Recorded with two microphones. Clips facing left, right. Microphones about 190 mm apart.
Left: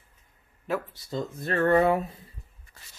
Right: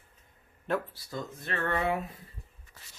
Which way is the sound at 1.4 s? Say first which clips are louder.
Left 9 dB; 40° left (ahead or behind).